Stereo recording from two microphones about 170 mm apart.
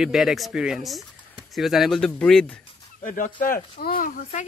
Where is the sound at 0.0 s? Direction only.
Centre (ahead or behind).